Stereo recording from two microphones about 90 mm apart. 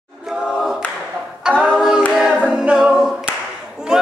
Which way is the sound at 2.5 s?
5° right (ahead or behind).